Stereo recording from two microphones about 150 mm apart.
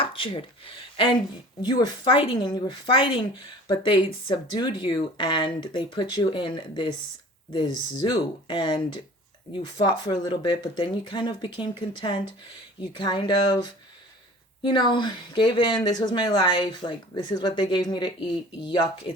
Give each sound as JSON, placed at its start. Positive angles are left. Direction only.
{"t": 0.0, "sound": "speech", "side_deg": 35}